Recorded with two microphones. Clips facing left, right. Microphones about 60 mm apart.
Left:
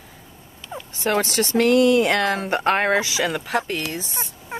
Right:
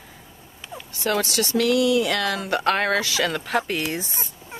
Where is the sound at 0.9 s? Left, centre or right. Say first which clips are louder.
Left 2 dB; left.